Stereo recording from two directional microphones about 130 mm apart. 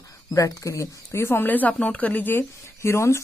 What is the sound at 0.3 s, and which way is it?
Speech, 25° left (ahead or behind).